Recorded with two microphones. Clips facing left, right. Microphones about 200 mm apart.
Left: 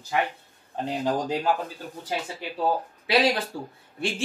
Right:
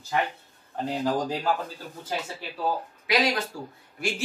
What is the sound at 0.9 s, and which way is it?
Speech, 20° left (ahead or behind).